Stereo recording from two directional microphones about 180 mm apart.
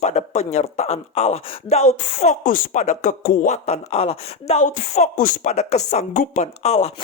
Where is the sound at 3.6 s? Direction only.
35° left (ahead or behind).